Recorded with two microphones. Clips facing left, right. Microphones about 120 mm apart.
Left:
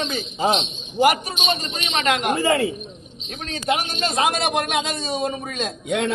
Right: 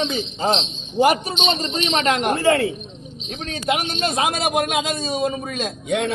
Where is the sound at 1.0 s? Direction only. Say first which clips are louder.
Right 1 dB; 25° right (ahead or behind).